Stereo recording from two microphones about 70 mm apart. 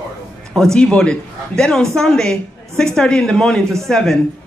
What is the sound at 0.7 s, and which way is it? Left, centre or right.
A woman's voice, centre.